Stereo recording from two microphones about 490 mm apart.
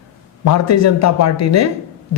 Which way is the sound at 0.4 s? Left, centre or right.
Left.